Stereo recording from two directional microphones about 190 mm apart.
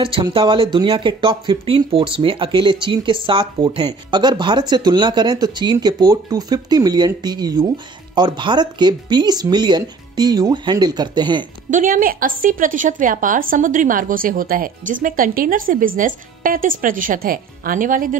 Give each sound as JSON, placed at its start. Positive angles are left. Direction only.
{"t": 0.0, "sound": "speech", "side_deg": -25}
{"t": 11.7, "sound": "a woman's voice", "side_deg": -45}